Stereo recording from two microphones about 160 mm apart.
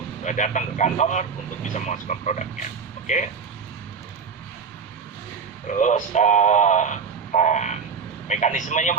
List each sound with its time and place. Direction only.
0.3 s speech: 50° left (ahead or behind)
5.6 s speech: 50° left (ahead or behind)